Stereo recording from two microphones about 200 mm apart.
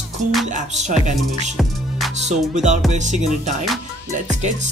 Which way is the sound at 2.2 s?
35° right (ahead or behind).